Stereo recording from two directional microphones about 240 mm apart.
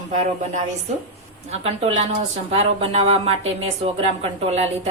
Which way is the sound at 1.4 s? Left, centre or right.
Right.